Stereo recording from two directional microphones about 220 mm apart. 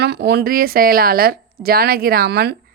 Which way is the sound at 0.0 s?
50° right (ahead or behind).